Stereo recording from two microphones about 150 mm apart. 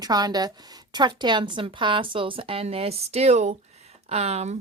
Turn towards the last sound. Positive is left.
turn(degrees=-45)  # may be behind; listen again after turning